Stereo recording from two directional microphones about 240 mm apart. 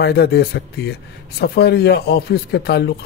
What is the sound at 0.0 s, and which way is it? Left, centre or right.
A man's voice, left.